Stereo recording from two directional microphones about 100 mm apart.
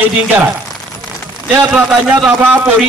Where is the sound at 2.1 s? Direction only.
15° right (ahead or behind).